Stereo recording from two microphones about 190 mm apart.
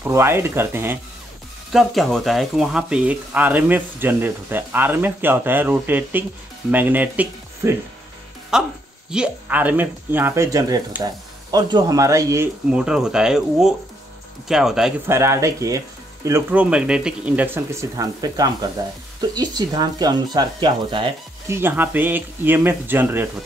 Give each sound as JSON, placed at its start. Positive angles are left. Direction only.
{"t": 0.0, "sound": "speech", "side_deg": -15}
{"t": 1.7, "sound": "speech", "side_deg": 0}
{"t": 12.6, "sound": "speech", "side_deg": -5}
{"t": 21.5, "sound": "speech", "side_deg": -10}